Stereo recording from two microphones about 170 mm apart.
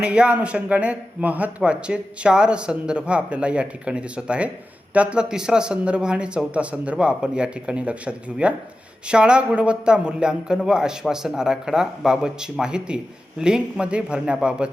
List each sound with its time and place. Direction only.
0.0 s a man's voice: 5° right (ahead or behind)